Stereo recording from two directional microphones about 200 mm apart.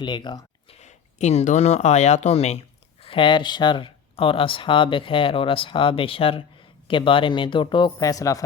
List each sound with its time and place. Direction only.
0.0 s speech: 20° left (ahead or behind)
0.8 s speech: 35° left (ahead or behind); by 8.4 s 15° left (ahead or behind)